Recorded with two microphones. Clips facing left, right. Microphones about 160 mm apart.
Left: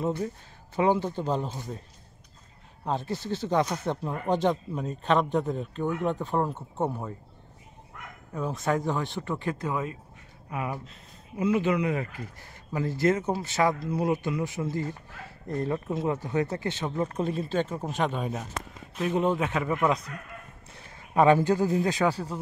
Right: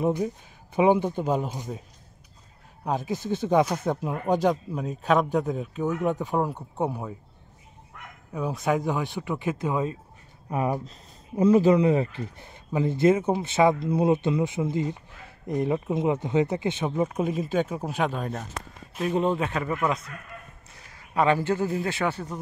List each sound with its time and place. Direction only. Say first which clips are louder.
0.0 s speech: right 4 dB; 15° right (ahead or behind)
2.9 s speech: right 3 dB; 10° right (ahead or behind)
8.3 s speech: right 2 dB; 15° right (ahead or behind)
9.0 s speech: right 2 dB; 5° right (ahead or behind)
9.4 s speech: right 6 dB; 15° right (ahead or behind)
10.5 s a man's voice: right 6 dB; 35° right (ahead or behind); by 19.8 s 10° left (ahead or behind)
21.1 s a man's voice: left 2 dB; 20° left (ahead or behind)